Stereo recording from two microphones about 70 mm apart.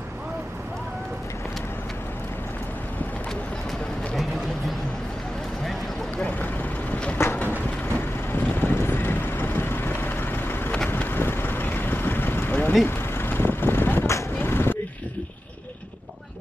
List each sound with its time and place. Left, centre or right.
7.2 s vehicle: left